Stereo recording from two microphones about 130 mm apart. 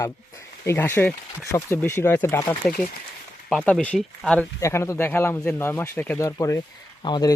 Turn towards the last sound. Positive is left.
turn(degrees=35)  # may be behind; listen again after turning